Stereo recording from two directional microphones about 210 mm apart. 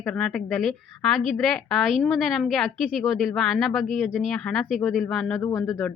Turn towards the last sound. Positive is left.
turn(degrees=15)  # may be behind; listen again after turning